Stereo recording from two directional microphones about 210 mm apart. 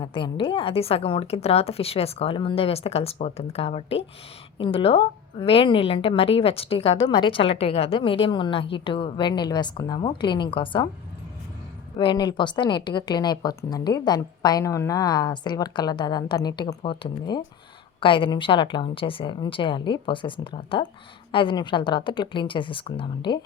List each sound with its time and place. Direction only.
0.0 s a woman's voice: 20° left (ahead or behind)
11.9 s a woman's voice: 20° left (ahead or behind)